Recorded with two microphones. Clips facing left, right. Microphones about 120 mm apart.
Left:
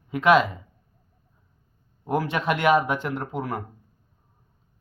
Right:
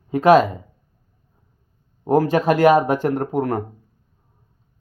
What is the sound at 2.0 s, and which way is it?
Speech, 40° right (ahead or behind).